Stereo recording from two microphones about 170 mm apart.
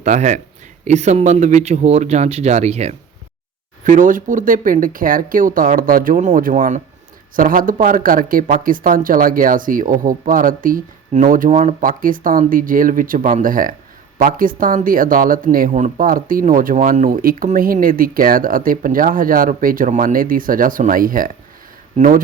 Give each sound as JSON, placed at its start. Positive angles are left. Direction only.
{"t": 0.0, "sound": "speech", "side_deg": -45}
{"t": 3.8, "sound": "speech", "side_deg": -50}